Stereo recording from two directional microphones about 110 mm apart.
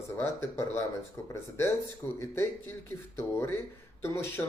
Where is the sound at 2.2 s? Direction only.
25° left (ahead or behind).